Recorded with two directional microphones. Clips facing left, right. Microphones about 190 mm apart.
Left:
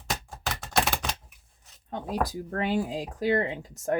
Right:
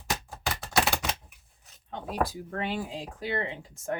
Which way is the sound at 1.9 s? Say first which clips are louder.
Left 1 dB; 40° left (ahead or behind).